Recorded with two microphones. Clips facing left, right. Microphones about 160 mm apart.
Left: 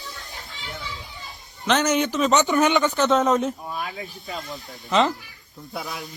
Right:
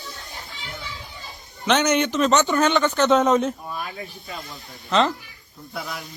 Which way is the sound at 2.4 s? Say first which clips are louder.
Even; 20° left (ahead or behind).